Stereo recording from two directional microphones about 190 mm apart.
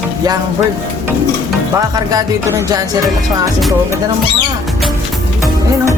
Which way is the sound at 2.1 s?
20° right (ahead or behind).